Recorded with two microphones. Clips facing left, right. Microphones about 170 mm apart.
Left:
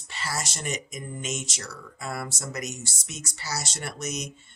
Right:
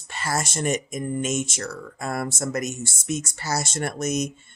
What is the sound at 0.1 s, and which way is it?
Speech, 50° right (ahead or behind).